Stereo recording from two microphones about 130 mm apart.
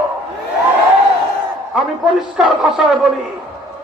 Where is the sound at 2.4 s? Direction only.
5° right (ahead or behind).